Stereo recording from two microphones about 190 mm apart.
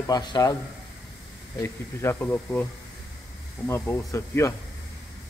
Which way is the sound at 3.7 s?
15° left (ahead or behind).